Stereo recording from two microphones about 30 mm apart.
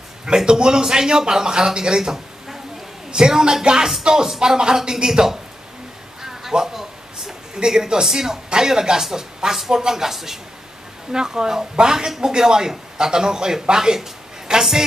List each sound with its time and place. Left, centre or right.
0.5 s speech: right
6.6 s a sound: centre
7.5 s speech: right
11.1 s a woman's voice: right